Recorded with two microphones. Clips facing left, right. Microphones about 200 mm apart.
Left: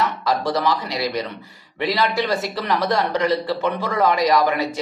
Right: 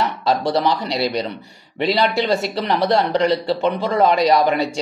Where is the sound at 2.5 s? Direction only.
25° right (ahead or behind).